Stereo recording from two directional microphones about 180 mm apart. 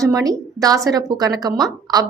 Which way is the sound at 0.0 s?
20° right (ahead or behind).